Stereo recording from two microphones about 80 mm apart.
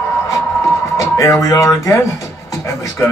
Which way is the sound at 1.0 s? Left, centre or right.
Left.